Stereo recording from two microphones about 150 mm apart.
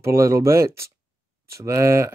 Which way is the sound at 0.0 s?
20° right (ahead or behind).